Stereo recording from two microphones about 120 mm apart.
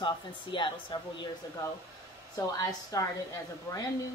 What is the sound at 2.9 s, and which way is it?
Speech, 30° left (ahead or behind).